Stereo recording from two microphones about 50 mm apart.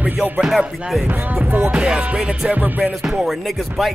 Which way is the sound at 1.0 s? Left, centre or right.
Right.